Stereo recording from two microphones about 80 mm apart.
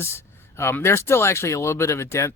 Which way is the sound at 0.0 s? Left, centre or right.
Left.